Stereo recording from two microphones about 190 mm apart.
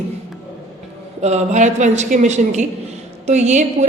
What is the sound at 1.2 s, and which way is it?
A woman's voice, 35° right (ahead or behind).